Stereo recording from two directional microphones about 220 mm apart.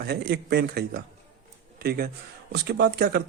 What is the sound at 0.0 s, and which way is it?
Speech, 45° right (ahead or behind).